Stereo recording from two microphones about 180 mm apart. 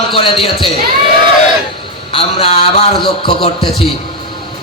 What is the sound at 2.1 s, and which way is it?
Speech, 30° left (ahead or behind).